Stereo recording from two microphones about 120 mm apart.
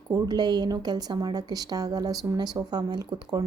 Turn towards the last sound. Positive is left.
turn(degrees=-35)  # may be behind; listen again after turning